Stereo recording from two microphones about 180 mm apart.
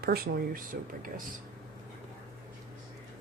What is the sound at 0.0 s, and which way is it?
Speech, 55° right (ahead or behind).